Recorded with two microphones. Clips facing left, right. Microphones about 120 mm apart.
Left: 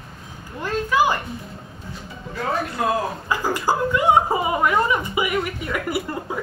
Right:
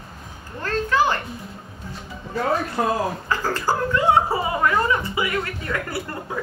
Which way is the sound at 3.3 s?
15° left (ahead or behind).